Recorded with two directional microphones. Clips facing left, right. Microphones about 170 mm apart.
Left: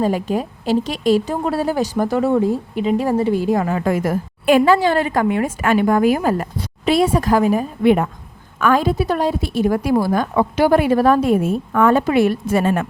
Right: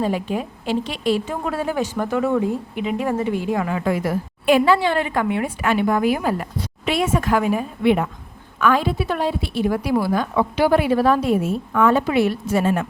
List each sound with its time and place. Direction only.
0.0 s a woman's voice: 40° left (ahead or behind); by 12.8 s 60° left (ahead or behind)